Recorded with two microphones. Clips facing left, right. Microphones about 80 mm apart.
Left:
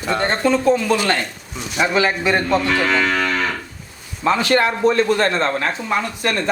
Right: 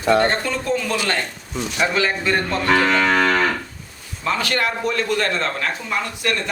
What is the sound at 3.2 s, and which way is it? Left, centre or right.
Cattle, right.